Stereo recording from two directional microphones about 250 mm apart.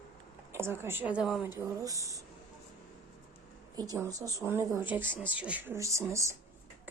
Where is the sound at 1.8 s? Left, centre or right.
Centre.